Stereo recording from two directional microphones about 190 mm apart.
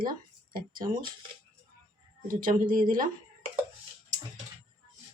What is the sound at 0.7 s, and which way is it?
Speech, 25° right (ahead or behind).